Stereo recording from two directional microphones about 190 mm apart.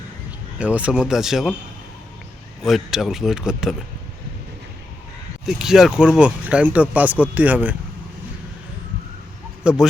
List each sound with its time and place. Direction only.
0.6 s speech: 5° right (ahead or behind)
2.6 s speech: centre (ahead or behind)
5.5 s speech: centre (ahead or behind)
9.7 s speech: 5° right (ahead or behind)